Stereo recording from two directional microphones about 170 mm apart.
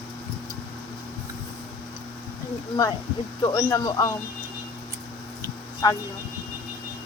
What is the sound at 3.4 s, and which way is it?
Speech, 20° left (ahead or behind).